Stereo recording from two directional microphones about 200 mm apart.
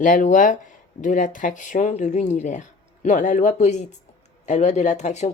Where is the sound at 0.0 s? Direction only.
40° left (ahead or behind).